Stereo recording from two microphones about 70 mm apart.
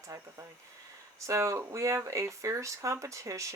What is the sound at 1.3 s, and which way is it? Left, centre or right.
Speech, right.